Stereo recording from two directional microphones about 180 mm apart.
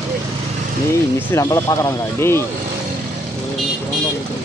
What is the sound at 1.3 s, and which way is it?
Speech, 15° left (ahead or behind).